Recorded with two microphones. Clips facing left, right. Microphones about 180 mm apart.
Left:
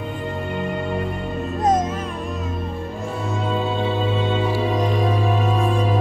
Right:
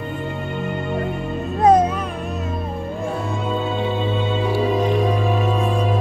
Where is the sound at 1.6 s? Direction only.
65° right (ahead or behind).